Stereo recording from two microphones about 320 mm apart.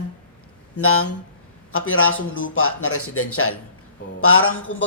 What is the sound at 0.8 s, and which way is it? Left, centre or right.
A woman's voice, left.